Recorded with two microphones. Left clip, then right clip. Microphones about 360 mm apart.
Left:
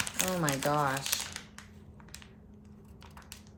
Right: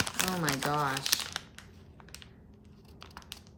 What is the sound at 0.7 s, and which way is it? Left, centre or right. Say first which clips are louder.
Speech: left 3 dB; centre.